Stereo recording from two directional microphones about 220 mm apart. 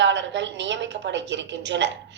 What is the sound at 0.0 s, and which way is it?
A woman's voice, 55° right (ahead or behind).